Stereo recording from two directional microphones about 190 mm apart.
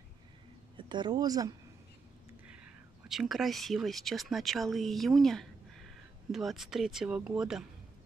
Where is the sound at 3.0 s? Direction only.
Centre (ahead or behind).